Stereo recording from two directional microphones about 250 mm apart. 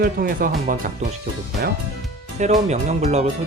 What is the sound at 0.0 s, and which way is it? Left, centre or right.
Speech, right.